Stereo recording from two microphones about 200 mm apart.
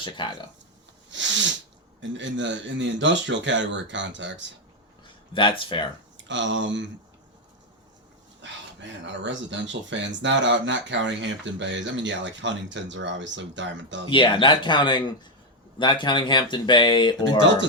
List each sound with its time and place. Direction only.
0.0 s speech: 25° left (ahead or behind)
1.1 s sneeze: 65° right (ahead or behind)
2.0 s speech: 65° right (ahead or behind)
5.3 s speech: 25° left (ahead or behind)
6.1 s speech: 65° right (ahead or behind)
8.4 s speech: 65° right (ahead or behind)
14.1 s speech: 25° left (ahead or behind)